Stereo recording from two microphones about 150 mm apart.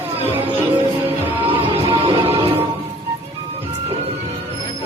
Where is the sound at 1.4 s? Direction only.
35° right (ahead or behind).